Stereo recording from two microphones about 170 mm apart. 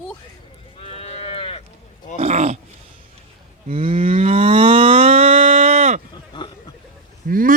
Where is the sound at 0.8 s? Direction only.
35° left (ahead or behind).